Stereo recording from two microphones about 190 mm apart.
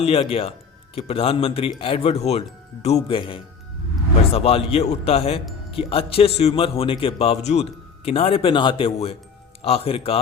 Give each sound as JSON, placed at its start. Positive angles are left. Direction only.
{"t": 0.0, "sound": "a man's voice", "side_deg": 30}